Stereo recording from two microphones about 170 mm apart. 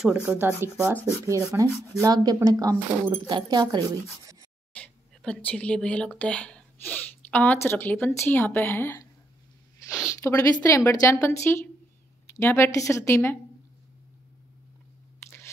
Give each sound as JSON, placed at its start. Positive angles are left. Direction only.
{"t": 0.0, "sound": "speech", "side_deg": -5}
{"t": 4.7, "sound": "speech", "side_deg": 5}
{"t": 10.1, "sound": "a woman's voice", "side_deg": 20}
{"t": 15.2, "sound": "biting", "side_deg": 15}